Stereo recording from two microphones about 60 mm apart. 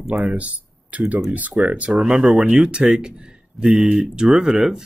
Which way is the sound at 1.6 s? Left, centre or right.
Centre.